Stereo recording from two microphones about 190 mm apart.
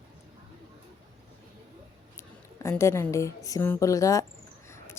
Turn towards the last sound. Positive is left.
turn(degrees=15)  # may be behind; listen again after turning